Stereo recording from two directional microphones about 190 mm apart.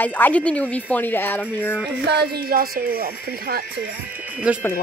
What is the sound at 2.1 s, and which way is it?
Speech, 55° right (ahead or behind).